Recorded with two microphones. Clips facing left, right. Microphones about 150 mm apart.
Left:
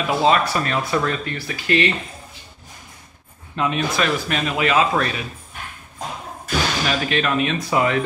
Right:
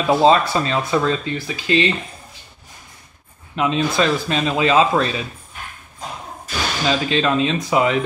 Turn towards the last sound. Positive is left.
turn(degrees=-20)  # may be behind; listen again after turning